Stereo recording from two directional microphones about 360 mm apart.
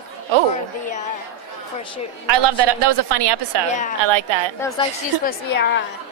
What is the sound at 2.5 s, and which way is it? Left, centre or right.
Speech, right.